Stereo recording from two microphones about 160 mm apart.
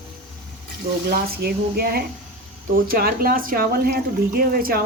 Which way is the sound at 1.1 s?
70° right (ahead or behind).